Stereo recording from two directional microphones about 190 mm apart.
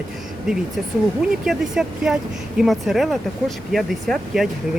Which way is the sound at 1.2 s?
5° right (ahead or behind).